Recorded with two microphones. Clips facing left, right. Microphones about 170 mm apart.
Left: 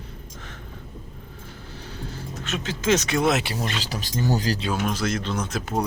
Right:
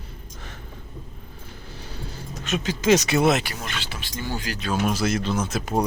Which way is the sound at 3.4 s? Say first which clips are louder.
Left 4 dB; 30° left (ahead or behind).